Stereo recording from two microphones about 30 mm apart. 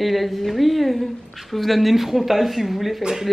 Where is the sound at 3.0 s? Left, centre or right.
Centre.